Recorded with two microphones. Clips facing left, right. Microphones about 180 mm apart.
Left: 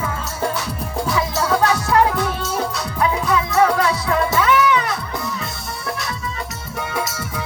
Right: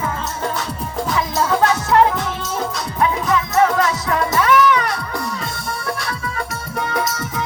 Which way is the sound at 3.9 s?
30° left (ahead or behind).